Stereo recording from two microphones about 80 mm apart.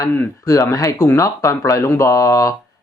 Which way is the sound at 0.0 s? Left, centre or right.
Left.